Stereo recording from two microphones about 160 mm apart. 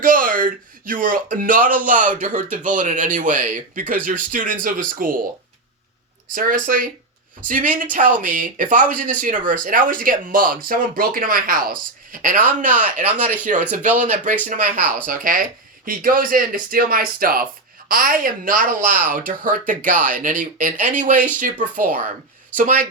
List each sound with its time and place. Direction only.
0.0 s a man's voice: 60° right (ahead or behind)
6.3 s speech: 60° right (ahead or behind)
12.8 s a man's voice: 10° right (ahead or behind)
14.0 s a man's voice: 55° right (ahead or behind)
22.5 s speech: 55° right (ahead or behind)